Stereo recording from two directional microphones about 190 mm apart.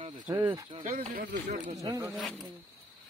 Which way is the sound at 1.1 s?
45° right (ahead or behind).